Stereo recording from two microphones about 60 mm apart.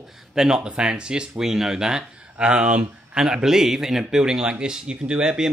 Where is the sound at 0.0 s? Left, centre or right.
Centre.